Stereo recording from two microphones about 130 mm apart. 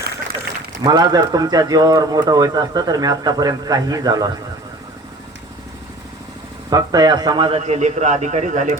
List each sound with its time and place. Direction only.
0.9 s speech: 30° right (ahead or behind)
6.7 s speech: 30° right (ahead or behind)
7.6 s speech: 60° right (ahead or behind)